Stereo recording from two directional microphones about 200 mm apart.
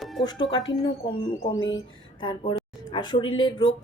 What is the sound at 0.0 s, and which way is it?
Music, centre (ahead or behind).